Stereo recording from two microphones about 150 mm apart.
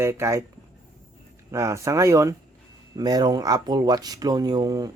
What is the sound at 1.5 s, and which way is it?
Speech, 20° right (ahead or behind).